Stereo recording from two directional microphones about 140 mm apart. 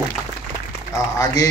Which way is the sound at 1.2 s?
25° left (ahead or behind).